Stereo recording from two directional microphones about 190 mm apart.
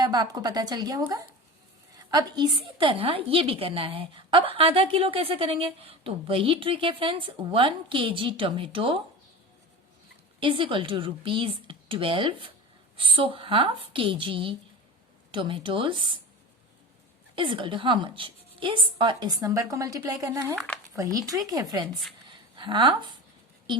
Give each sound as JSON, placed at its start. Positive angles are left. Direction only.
{"t": 0.0, "sound": "a woman's voice", "side_deg": -20}
{"t": 2.0, "sound": "a woman's voice", "side_deg": -20}
{"t": 10.4, "sound": "a woman's voice", "side_deg": -25}
{"t": 17.3, "sound": "a woman's voice", "side_deg": -25}
{"t": 22.3, "sound": "a sound", "side_deg": -25}